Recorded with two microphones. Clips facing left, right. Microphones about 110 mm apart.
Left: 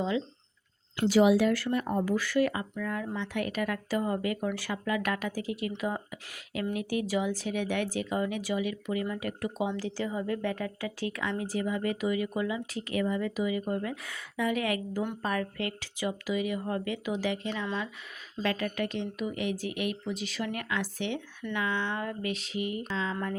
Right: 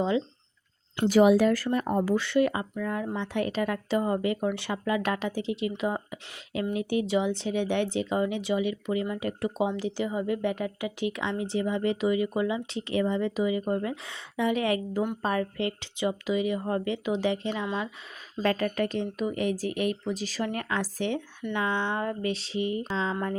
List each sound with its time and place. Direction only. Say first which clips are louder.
1.0 s speech: right 3 dB; 50° right (ahead or behind)
2.0 s speech: right 3 dB; 25° right (ahead or behind)
18.4 s speech: right 4 dB; 40° right (ahead or behind)
21.4 s speech: right 3 dB; 25° right (ahead or behind)